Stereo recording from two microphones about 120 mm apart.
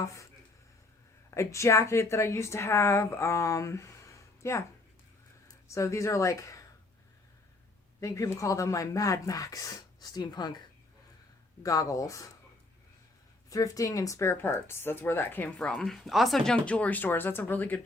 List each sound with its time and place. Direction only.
0.0 s speech: 25° left (ahead or behind)
1.3 s speech: 25° left (ahead or behind)
5.6 s speech: 25° left (ahead or behind)
8.0 s speech: 25° left (ahead or behind)
13.5 s speech: 30° left (ahead or behind)